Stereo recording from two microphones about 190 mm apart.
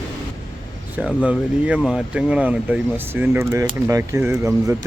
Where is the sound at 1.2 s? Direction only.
5° right (ahead or behind).